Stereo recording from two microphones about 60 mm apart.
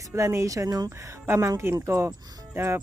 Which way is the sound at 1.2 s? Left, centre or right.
Right.